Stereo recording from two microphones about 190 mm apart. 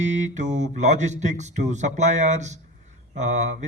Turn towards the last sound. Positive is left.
turn(degrees=-40)  # may be behind; listen again after turning